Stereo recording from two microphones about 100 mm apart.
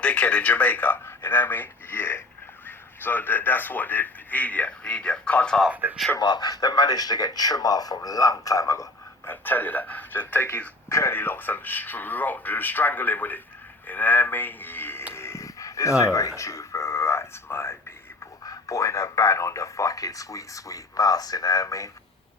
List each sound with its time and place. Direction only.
0.0 s speech: 15° left (ahead or behind)
5.6 s speech: 15° right (ahead or behind)
6.1 s speech: 45° left (ahead or behind)
9.2 s a man's voice: 20° left (ahead or behind)
15.1 s a sound: 25° left (ahead or behind)
18.4 s speech: 35° left (ahead or behind)